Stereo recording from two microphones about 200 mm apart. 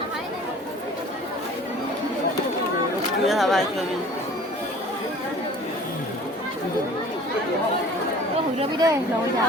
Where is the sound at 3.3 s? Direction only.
Centre (ahead or behind).